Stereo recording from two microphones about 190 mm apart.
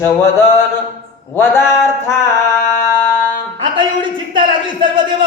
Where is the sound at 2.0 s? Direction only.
15° left (ahead or behind).